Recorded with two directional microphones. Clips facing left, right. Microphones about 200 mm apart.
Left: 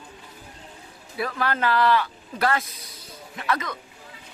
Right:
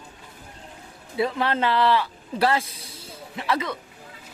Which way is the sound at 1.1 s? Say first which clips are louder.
Right 3 dB; 25° right (ahead or behind).